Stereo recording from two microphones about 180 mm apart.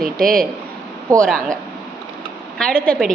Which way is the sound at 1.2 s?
5° left (ahead or behind).